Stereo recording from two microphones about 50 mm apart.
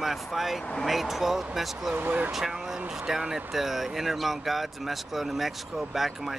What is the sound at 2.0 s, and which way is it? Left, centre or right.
Speech, right.